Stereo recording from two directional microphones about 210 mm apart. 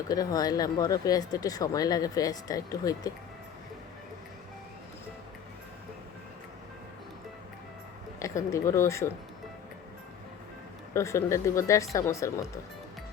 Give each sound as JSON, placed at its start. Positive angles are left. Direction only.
{"t": 0.1, "sound": "speech", "side_deg": 15}
{"t": 8.2, "sound": "speech", "side_deg": 15}
{"t": 10.9, "sound": "speech", "side_deg": 15}